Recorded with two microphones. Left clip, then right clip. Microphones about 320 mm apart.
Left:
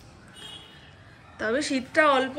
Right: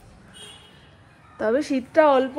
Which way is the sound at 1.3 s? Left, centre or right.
Centre.